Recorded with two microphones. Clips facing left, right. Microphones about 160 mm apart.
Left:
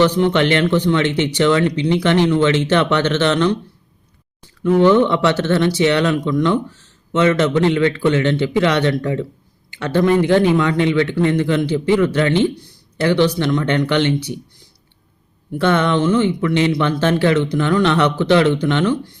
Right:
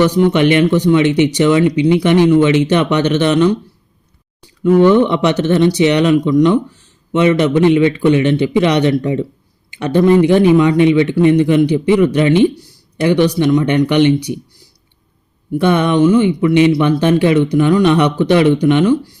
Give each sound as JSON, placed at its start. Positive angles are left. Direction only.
{"t": 0.0, "sound": "speech", "side_deg": -10}
{"t": 15.5, "sound": "speech", "side_deg": -15}